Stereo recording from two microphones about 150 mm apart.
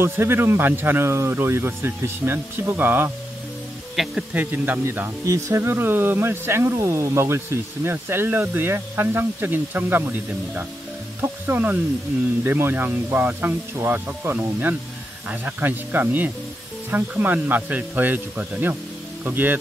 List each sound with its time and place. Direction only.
0.0 s speech: 15° right (ahead or behind)